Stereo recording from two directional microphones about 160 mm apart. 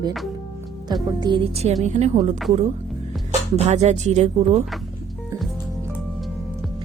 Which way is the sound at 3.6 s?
45° right (ahead or behind).